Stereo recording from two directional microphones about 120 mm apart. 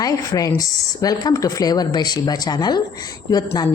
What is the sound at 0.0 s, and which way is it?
A woman's voice, 30° left (ahead or behind).